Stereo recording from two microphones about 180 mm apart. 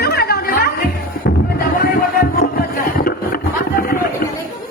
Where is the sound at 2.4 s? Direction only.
55° left (ahead or behind).